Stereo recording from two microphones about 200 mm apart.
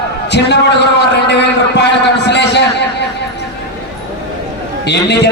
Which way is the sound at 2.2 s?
60° left (ahead or behind).